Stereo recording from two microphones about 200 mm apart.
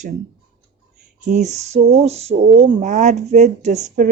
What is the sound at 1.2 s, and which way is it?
Speech, 35° right (ahead or behind).